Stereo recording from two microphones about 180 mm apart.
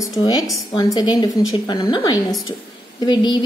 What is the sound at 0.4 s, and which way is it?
Speech, centre (ahead or behind).